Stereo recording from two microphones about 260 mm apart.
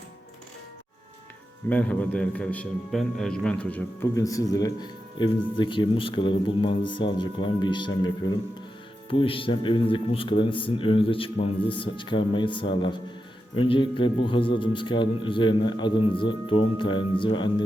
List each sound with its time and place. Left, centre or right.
1.7 s a man's voice: centre